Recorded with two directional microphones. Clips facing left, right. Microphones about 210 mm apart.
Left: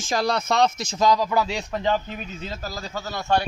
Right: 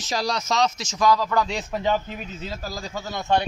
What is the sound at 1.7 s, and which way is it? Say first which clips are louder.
Speech: even; 5° right (ahead or behind).